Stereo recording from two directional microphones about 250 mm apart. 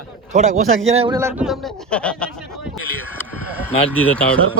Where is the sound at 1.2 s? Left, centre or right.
Centre.